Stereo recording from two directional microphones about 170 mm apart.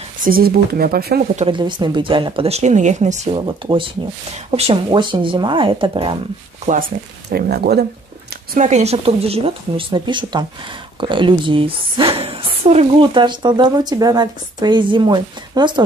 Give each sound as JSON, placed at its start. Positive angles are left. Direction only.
{"t": 0.2, "sound": "speech", "side_deg": -60}
{"t": 1.3, "sound": "speech", "side_deg": -30}
{"t": 3.3, "sound": "a woman's voice", "side_deg": -30}
{"t": 6.6, "sound": "speech", "side_deg": -45}
{"t": 7.2, "sound": "speech", "side_deg": -70}
{"t": 8.5, "sound": "a woman's voice", "side_deg": -45}